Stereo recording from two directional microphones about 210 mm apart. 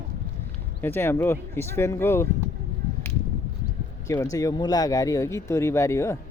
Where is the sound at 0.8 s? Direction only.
10° left (ahead or behind).